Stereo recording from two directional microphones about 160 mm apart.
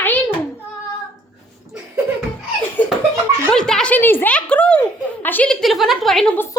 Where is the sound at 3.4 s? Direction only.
5° left (ahead or behind).